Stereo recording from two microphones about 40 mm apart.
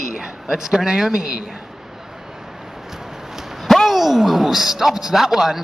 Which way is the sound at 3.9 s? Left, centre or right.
Centre.